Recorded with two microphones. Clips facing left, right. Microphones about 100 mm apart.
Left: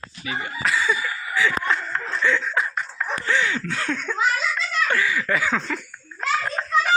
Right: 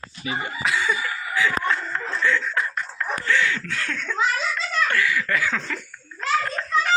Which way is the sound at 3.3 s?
20° left (ahead or behind).